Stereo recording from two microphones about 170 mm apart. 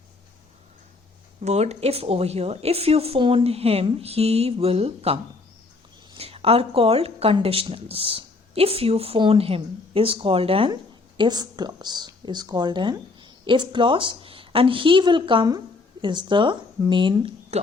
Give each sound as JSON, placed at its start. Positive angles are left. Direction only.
{"t": 1.4, "sound": "speech", "side_deg": -40}